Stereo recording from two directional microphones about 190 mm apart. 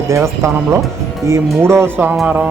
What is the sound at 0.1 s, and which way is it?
Speech, 15° right (ahead or behind).